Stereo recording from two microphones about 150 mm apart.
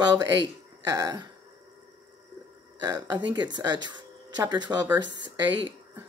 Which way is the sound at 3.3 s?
30° right (ahead or behind).